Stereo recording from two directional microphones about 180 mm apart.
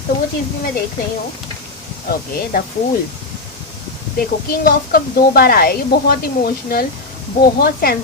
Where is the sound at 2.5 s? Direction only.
55° left (ahead or behind).